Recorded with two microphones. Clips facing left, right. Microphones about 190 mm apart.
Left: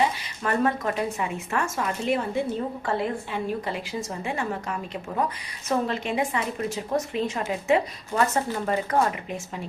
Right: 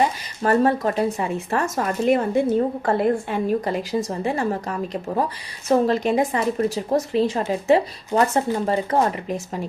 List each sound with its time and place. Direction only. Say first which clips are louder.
0.4 s a woman's voice: right 6 dB; 35° right (ahead or behind)
5.6 s speech: right 8 dB; 40° right (ahead or behind)